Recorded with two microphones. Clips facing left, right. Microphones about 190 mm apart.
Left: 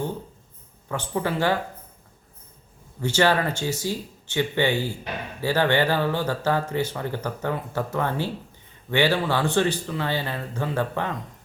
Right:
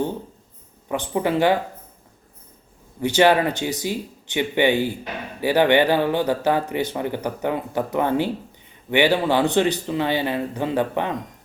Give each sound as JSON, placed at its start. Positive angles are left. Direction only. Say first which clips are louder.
{"t": 0.9, "sound": "speech", "louder": "right 4 dB", "side_deg": -15}
{"t": 3.0, "sound": "speech", "louder": "right 5 dB", "side_deg": -15}